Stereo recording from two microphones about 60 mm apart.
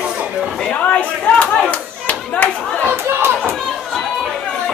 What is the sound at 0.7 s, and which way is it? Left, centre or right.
Clapping, left.